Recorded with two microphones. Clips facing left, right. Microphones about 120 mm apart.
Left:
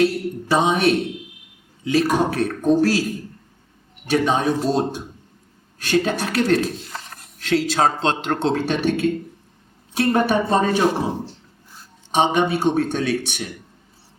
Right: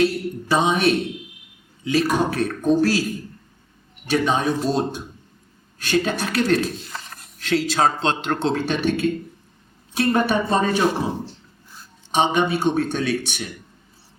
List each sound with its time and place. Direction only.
0.0 s speech: 55° left (ahead or behind); by 11.9 s 35° left (ahead or behind)
12.1 s speech: 55° left (ahead or behind)